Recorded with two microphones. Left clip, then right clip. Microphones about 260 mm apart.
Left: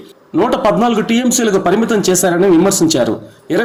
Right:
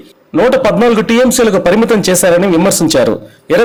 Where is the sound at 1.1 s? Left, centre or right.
Right.